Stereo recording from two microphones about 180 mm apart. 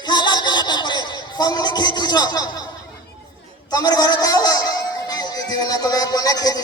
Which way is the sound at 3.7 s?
20° left (ahead or behind).